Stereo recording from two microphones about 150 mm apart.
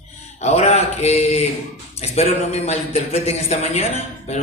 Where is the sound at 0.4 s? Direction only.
45° left (ahead or behind).